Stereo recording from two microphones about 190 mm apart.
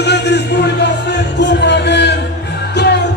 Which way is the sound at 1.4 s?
65° left (ahead or behind).